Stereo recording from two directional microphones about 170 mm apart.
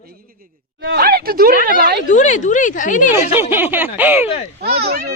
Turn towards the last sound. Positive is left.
turn(degrees=-65)  # may be behind; listen again after turning